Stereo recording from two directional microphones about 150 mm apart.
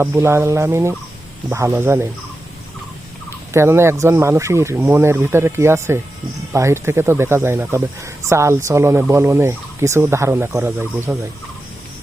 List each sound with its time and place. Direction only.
0.0 s speech: 15° right (ahead or behind)
3.5 s speech: 15° right (ahead or behind)